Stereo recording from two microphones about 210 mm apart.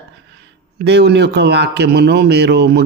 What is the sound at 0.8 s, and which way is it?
A man's voice, 50° right (ahead or behind).